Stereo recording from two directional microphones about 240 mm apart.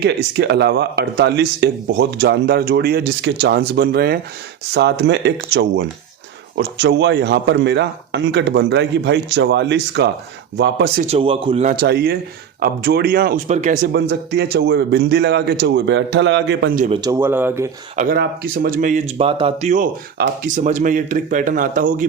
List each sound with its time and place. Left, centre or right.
0.0 s speech: right
11.0 s a man's voice: right
13.9 s speech: right
17.0 s speech: centre
17.9 s speech: right